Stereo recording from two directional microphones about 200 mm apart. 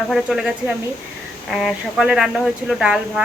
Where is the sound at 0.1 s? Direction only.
Centre (ahead or behind).